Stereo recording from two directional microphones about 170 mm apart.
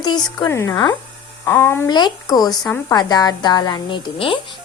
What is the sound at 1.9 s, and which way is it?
A woman's voice, 25° left (ahead or behind).